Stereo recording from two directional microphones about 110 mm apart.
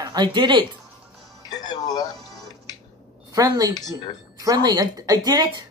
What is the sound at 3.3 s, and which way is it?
Speech, 35° right (ahead or behind).